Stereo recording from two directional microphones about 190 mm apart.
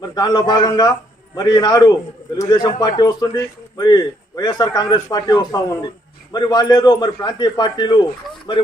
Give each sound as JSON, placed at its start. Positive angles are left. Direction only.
{"t": 0.0, "sound": "speech", "side_deg": 20}